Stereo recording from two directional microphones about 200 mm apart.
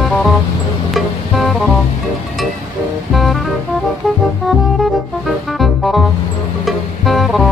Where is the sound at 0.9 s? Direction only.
Centre (ahead or behind).